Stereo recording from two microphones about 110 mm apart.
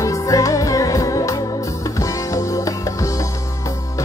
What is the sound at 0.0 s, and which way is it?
Music, 30° left (ahead or behind).